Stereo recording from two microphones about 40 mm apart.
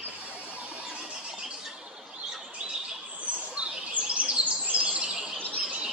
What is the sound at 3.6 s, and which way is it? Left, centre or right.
Bird, right.